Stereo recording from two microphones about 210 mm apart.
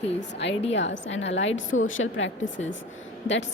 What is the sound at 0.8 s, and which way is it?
A woman's voice, 60° left (ahead or behind).